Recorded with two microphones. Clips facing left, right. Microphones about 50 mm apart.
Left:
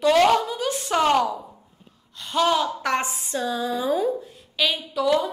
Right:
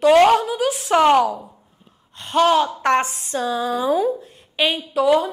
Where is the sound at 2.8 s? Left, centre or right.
Right.